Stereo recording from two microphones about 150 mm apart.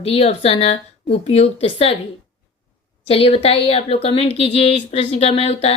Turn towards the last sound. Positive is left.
turn(degrees=40)  # may be behind; listen again after turning